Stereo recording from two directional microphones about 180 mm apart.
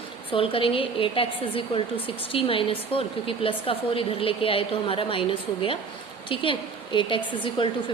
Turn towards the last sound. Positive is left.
turn(degrees=30)  # may be behind; listen again after turning